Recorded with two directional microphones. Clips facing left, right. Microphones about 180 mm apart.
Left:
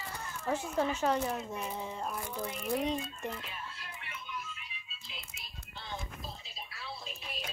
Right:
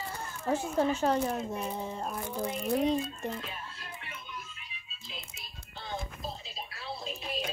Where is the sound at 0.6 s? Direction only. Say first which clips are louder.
Right 4 dB; 30° right (ahead or behind).